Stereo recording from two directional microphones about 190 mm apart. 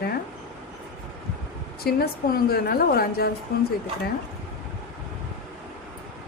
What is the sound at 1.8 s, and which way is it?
A woman's voice, 55° left (ahead or behind).